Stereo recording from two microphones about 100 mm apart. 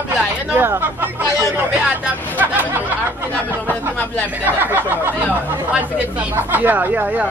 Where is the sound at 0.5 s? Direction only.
20° right (ahead or behind).